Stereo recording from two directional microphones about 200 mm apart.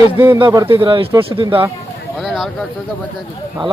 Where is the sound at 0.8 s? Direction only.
25° right (ahead or behind).